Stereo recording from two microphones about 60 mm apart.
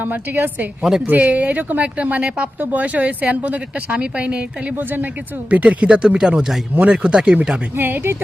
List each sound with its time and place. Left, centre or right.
0.0 s a woman's voice: right
0.8 s speech: centre
1.0 s speech: right
5.5 s speech: right
7.8 s a woman's voice: right